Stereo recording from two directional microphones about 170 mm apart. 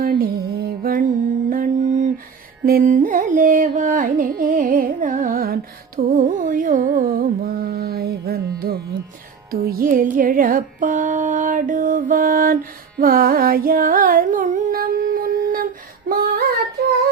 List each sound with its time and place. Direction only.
0.0 s music: 60° right (ahead or behind)
13.0 s carnatic music: 60° right (ahead or behind)
16.0 s female singing: 60° right (ahead or behind)